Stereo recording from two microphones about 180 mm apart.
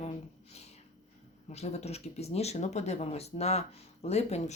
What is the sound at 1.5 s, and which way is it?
Speech, 35° left (ahead or behind).